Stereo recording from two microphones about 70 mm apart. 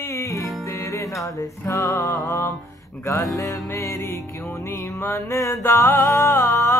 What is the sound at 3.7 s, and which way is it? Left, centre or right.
Mantra, left.